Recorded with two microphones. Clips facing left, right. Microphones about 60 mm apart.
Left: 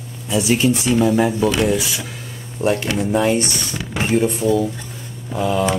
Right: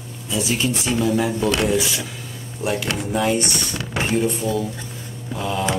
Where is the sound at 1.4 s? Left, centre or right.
Centre.